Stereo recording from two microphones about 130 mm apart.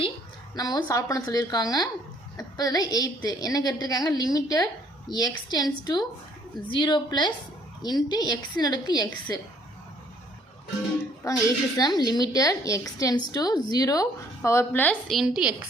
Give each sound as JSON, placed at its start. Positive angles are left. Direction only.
{"t": 0.5, "sound": "a woman's voice", "side_deg": 30}
{"t": 11.2, "sound": "a woman's voice", "side_deg": 25}
{"t": 15.0, "sound": "a woman's voice", "side_deg": 0}